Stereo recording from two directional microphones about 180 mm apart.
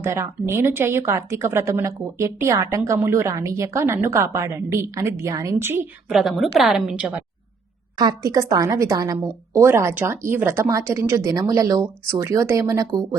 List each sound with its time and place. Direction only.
0.0 s speech: 15° right (ahead or behind)
6.1 s a woman's voice: centre (ahead or behind)
7.9 s speech: 20° right (ahead or behind)